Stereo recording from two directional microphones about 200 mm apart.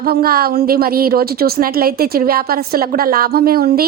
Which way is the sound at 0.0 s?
50° right (ahead or behind).